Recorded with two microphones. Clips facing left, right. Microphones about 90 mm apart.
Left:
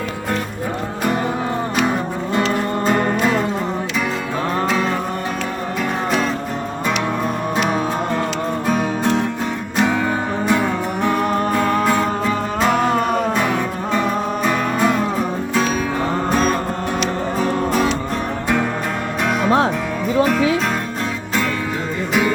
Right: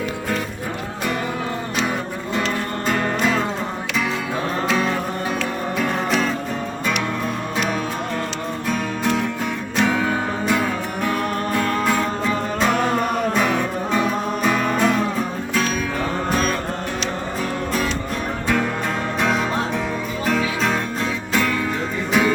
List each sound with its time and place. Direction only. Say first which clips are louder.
5.8 s music: left 1 dB; 5° left (ahead or behind)
8.6 s music: left 3 dB; 40° left (ahead or behind)
9.7 s music: left 1 dB; 15° left (ahead or behind)
16.3 s music: left 4 dB; 35° left (ahead or behind)
19.2 s music: left 6 dB; 5° left (ahead or behind)